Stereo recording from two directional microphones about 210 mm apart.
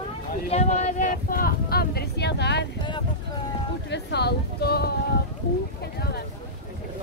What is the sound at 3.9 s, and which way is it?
Speech, 55° left (ahead or behind).